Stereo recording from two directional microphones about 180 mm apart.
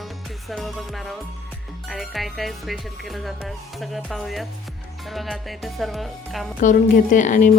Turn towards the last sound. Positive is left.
turn(degrees=45)  # may be behind; listen again after turning